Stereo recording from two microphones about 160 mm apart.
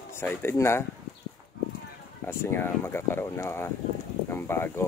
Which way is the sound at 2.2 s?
15° left (ahead or behind).